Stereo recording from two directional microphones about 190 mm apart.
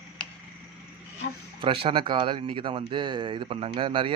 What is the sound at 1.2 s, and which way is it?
Speech, 65° left (ahead or behind).